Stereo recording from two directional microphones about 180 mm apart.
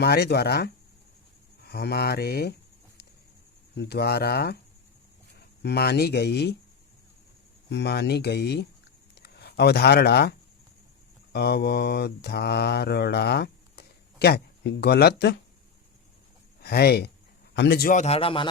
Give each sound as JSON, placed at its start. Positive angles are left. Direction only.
{"t": 0.0, "sound": "speech", "side_deg": 65}
{"t": 3.8, "sound": "speech", "side_deg": 65}
{"t": 5.6, "sound": "speech", "side_deg": 65}
{"t": 7.7, "sound": "speech", "side_deg": 70}
{"t": 11.3, "sound": "mantra", "side_deg": 65}
{"t": 16.6, "sound": "speech", "side_deg": 60}
{"t": 17.9, "sound": "speech", "side_deg": 35}